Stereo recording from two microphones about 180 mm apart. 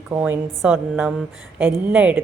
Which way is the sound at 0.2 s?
5° right (ahead or behind).